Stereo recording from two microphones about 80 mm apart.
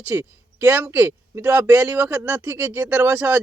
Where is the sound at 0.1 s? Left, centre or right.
Right.